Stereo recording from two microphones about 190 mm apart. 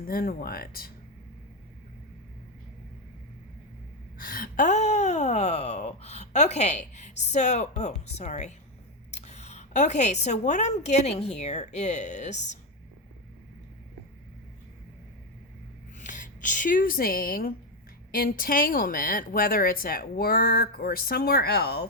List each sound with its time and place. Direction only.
0.0 s speech: 50° left (ahead or behind)
4.2 s gasp: 45° left (ahead or behind)
16.0 s speech: 40° left (ahead or behind); by 21.8 s 60° left (ahead or behind)